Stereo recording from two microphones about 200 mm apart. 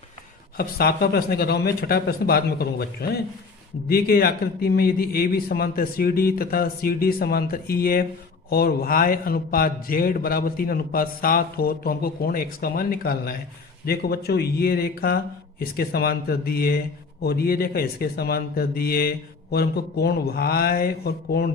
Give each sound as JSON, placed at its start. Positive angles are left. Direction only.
{"t": 0.5, "sound": "speech", "side_deg": 50}